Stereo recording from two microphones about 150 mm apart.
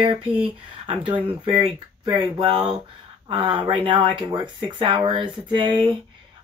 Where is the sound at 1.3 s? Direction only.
35° right (ahead or behind).